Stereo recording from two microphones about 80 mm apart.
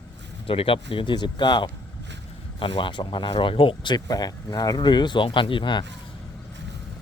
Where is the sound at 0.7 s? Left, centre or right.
Left.